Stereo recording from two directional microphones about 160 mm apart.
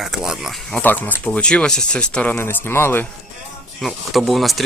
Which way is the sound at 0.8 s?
10° left (ahead or behind).